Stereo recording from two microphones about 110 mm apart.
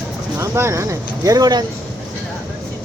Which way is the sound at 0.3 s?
25° right (ahead or behind).